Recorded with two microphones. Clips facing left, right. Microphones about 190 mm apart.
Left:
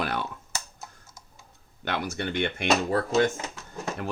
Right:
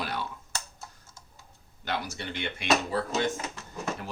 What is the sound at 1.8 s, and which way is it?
Speech, 55° left (ahead or behind).